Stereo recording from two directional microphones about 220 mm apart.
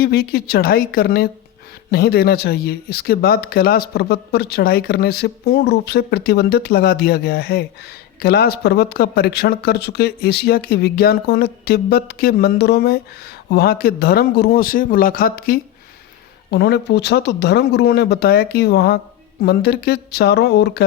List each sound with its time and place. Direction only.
0.0 s speech: 45° left (ahead or behind)